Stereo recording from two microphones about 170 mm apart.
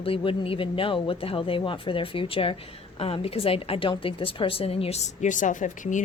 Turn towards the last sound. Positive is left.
turn(degrees=50)  # may be behind; listen again after turning